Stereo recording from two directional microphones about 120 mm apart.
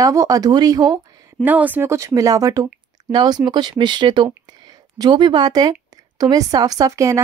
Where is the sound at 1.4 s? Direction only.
15° right (ahead or behind).